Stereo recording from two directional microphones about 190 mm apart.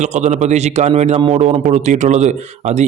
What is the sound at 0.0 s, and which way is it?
A man's voice, 40° right (ahead or behind).